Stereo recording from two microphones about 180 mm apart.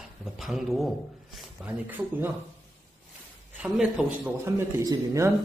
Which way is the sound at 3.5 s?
5° right (ahead or behind).